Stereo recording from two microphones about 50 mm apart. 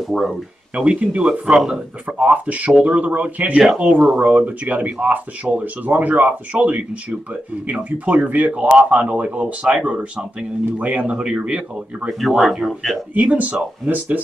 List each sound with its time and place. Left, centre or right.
0.0 s speech: centre
0.7 s speech: centre
3.1 s speech: right
3.6 s speech: centre
4.2 s speech: right
12.1 s speech: centre
13.1 s speech: right